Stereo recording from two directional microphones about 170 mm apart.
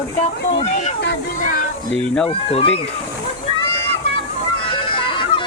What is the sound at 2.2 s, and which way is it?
Speech, 35° left (ahead or behind).